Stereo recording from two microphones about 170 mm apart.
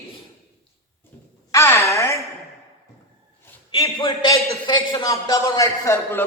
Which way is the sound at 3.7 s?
25° left (ahead or behind).